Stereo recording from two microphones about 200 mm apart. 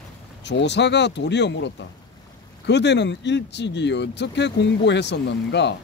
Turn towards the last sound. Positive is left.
turn(degrees=60)  # may be behind; listen again after turning